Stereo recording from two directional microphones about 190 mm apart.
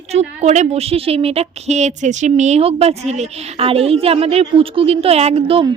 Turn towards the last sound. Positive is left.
turn(degrees=-30)  # may be behind; listen again after turning